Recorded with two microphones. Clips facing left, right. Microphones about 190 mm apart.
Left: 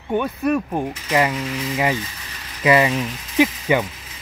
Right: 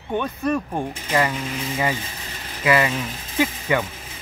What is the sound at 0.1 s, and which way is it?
Speech, 10° left (ahead or behind).